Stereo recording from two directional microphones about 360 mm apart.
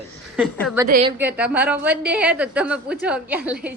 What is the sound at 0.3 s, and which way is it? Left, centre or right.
Speech, centre.